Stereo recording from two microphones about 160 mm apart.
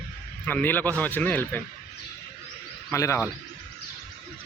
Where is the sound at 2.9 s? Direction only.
20° left (ahead or behind).